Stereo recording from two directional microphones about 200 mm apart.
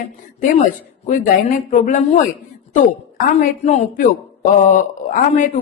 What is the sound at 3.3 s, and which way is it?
Speech, 35° left (ahead or behind).